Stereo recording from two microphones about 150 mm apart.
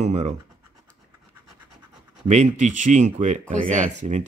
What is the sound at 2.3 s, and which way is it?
Speech, 50° right (ahead or behind).